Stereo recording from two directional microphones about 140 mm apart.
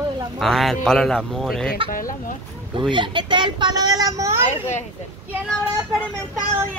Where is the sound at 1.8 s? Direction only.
85° left.